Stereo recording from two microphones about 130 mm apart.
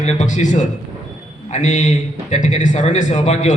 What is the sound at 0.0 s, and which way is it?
A man's voice, 65° left (ahead or behind).